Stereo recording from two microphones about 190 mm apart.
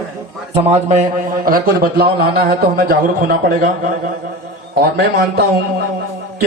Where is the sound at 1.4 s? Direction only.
50° right (ahead or behind).